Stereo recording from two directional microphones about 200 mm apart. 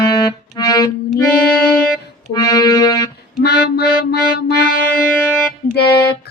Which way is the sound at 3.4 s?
55° left (ahead or behind).